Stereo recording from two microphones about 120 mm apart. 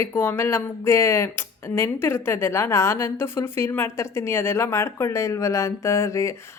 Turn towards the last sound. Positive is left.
turn(degrees=25)  # may be behind; listen again after turning